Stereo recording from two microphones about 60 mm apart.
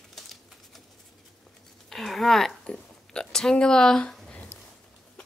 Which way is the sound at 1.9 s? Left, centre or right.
Centre.